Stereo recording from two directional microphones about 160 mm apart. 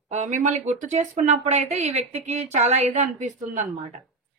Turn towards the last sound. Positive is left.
turn(degrees=-50)  # may be behind; listen again after turning